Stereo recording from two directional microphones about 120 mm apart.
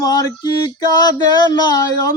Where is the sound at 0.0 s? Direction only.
35° left (ahead or behind).